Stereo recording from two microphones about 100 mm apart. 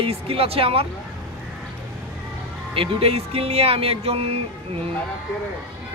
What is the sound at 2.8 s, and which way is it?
Speech, 75° right (ahead or behind).